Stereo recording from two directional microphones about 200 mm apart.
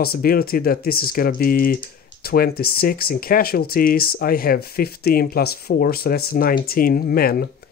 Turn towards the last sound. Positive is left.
turn(degrees=50)  # may be behind; listen again after turning